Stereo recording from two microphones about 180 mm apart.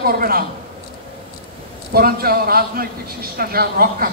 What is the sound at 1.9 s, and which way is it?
A man's voice, 55° right (ahead or behind).